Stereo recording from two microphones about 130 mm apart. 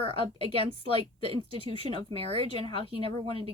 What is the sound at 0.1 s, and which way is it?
Speech, 45° left (ahead or behind).